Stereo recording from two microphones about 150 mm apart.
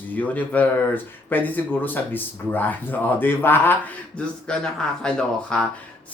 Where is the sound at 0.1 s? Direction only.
10° left (ahead or behind).